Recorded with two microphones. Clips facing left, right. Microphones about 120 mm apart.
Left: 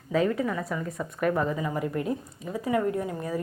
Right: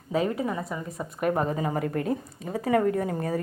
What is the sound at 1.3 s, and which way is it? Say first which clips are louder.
A woman's voice: right 1 dB; 35° right (ahead or behind).